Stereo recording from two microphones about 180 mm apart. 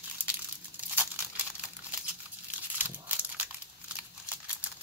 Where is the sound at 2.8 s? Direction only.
10° right (ahead or behind).